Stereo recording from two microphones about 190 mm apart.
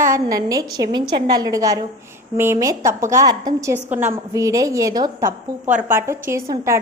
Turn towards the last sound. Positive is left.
turn(degrees=-15)  # may be behind; listen again after turning